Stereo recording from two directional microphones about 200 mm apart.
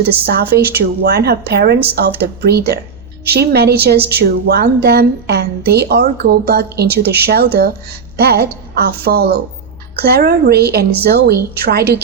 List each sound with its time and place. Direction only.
0.0 s speech: 50° right (ahead or behind)